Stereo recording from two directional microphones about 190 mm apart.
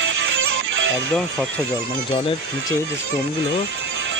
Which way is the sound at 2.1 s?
30° left (ahead or behind).